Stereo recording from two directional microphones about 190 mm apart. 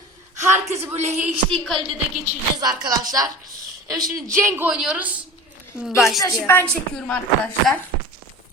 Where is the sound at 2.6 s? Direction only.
20° right (ahead or behind); by 6.2 s centre (ahead or behind).